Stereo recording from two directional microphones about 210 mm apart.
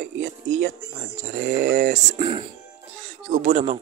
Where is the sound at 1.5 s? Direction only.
45° right (ahead or behind).